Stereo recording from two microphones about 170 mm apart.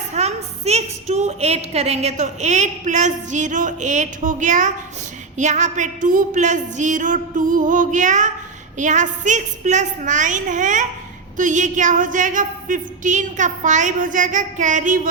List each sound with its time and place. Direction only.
0.1 s a woman's voice: 40° right (ahead or behind)